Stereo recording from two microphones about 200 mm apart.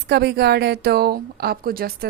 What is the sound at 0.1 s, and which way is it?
A woman's voice, 55° right (ahead or behind).